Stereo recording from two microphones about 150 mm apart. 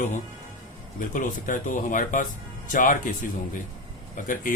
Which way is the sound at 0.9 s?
60° left (ahead or behind).